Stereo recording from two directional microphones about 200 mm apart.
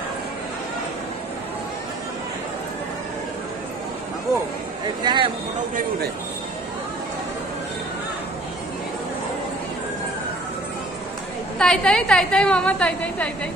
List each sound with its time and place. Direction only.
5.0 s speech: 25° right (ahead or behind)
11.5 s a woman's voice: 5° left (ahead or behind)